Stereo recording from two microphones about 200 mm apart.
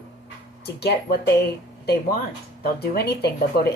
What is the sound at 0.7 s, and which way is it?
A woman's voice, 55° left (ahead or behind).